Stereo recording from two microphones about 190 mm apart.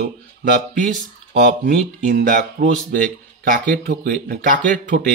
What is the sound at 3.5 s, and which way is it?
Speech, 45° right (ahead or behind).